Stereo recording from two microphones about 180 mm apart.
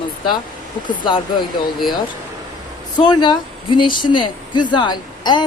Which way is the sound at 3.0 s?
25° left (ahead or behind).